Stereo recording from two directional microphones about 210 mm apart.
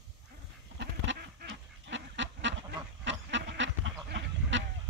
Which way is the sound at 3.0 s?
60° right (ahead or behind).